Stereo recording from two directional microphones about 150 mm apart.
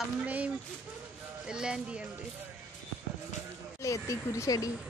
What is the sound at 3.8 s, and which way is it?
Speech, 20° left (ahead or behind).